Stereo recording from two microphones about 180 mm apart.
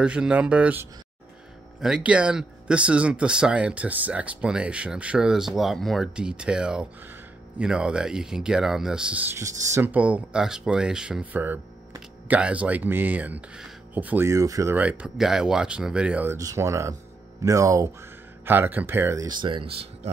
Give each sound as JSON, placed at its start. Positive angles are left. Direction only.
{"t": 0.0, "sound": "speech", "side_deg": -5}